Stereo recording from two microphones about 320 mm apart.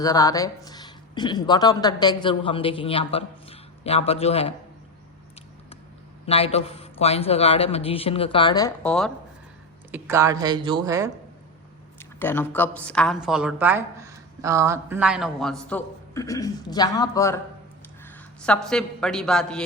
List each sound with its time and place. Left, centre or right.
0.0 s speech: centre
6.2 s speech: centre
9.9 s speech: centre
11.9 s a woman's voice: centre